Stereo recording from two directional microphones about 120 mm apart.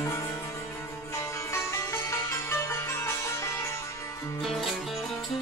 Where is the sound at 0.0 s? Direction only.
20° left (ahead or behind).